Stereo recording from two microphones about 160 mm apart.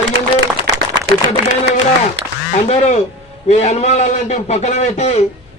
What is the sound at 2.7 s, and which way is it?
A man's voice, 45° left (ahead or behind).